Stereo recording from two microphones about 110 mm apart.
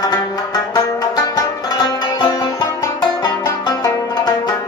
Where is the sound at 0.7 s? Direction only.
35° left (ahead or behind).